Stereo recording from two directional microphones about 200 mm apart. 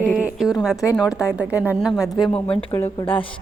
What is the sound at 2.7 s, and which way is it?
Speech, 15° left (ahead or behind).